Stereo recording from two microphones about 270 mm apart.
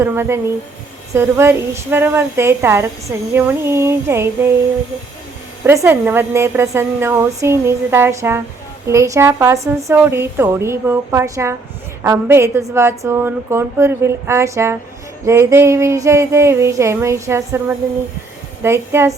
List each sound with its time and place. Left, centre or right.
0.0 s a woman's voice: centre
5.6 s a woman's voice: centre